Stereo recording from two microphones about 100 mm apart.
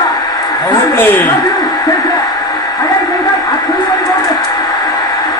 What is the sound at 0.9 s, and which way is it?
Speech, 25° left (ahead or behind).